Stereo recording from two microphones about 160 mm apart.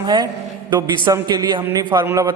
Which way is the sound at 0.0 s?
25° right (ahead or behind).